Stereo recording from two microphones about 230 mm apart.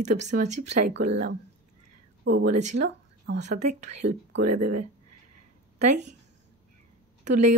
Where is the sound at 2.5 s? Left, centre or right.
Right.